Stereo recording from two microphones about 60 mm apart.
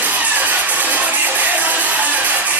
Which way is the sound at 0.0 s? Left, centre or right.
Right.